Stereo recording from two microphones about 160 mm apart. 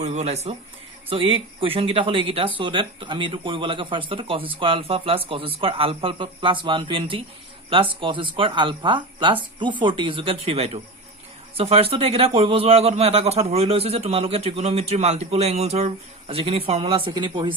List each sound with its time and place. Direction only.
0.0 s a man's voice: 45° right (ahead or behind)